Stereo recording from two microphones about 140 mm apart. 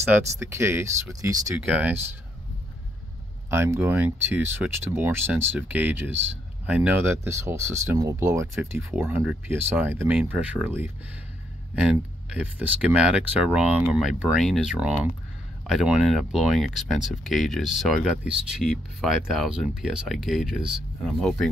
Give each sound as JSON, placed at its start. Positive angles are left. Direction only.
{"t": 0.4, "sound": "speech", "side_deg": -20}
{"t": 1.7, "sound": "speech", "side_deg": -10}
{"t": 3.4, "sound": "speech", "side_deg": -20}